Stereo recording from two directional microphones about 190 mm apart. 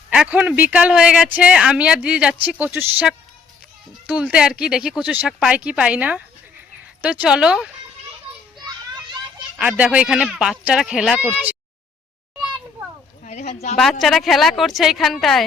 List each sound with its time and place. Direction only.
0.1 s speech: 5° right (ahead or behind)
9.6 s speech: 5° right (ahead or behind)
13.2 s speech: 35° left (ahead or behind)
14.0 s speech: centre (ahead or behind)